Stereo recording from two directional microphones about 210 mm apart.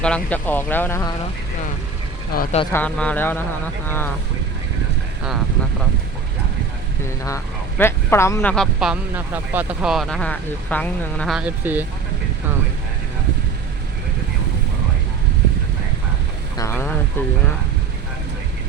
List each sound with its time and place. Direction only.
0.0 s a man's voice: 5° left (ahead or behind)
2.3 s speech: 45° left (ahead or behind)
2.7 s a man's voice: 5° left (ahead or behind)
7.3 s speech: 10° left (ahead or behind); by 11.9 s 10° right (ahead or behind)
16.6 s a man's voice: 10° left (ahead or behind)